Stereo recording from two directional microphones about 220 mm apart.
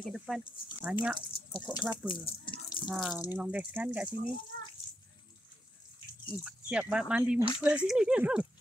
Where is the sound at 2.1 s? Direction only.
20° left (ahead or behind).